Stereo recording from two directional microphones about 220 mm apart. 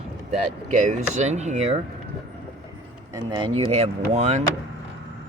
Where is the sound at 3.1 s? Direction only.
20° right (ahead or behind).